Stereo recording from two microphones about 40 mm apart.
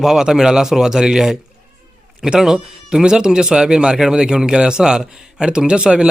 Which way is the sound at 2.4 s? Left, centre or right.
Centre.